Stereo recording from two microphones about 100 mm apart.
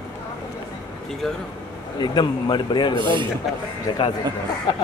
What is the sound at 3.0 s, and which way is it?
Speech, 55° right (ahead or behind).